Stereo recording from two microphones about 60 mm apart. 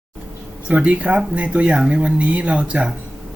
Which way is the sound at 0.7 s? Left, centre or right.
Right.